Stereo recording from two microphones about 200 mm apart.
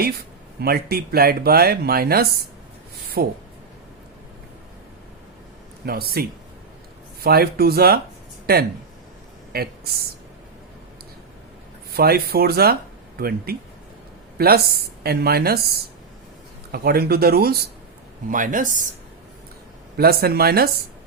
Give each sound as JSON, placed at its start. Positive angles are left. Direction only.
{"t": 0.6, "sound": "speech", "side_deg": -50}
{"t": 5.8, "sound": "speech", "side_deg": -50}
{"t": 7.3, "sound": "speech", "side_deg": -50}
{"t": 11.9, "sound": "speech", "side_deg": -50}
{"t": 16.7, "sound": "speech", "side_deg": -50}
{"t": 20.0, "sound": "speech", "side_deg": -50}